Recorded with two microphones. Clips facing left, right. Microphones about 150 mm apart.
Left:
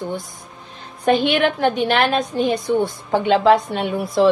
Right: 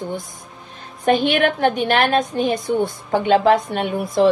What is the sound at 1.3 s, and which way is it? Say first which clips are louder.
Speech: even; 50° right (ahead or behind).